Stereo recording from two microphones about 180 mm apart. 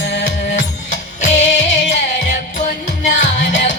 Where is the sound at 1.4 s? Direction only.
90° left.